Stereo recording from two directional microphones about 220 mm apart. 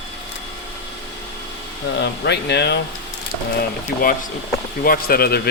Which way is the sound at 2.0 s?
50° left (ahead or behind).